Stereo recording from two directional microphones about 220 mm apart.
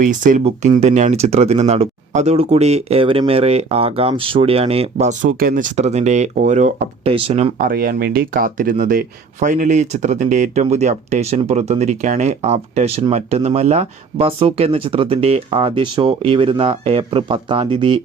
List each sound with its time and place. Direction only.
0.0 s speech: 35° right (ahead or behind)
7.6 s speech: 40° right (ahead or behind); by 17.9 s 25° right (ahead or behind)